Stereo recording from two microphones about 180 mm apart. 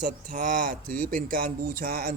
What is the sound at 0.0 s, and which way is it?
A man's voice, 50° right (ahead or behind).